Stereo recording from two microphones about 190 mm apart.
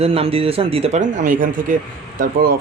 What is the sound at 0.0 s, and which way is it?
Speech, 30° right (ahead or behind).